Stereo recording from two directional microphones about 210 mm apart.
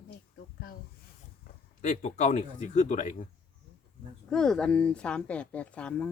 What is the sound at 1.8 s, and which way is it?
Speech, 35° left (ahead or behind).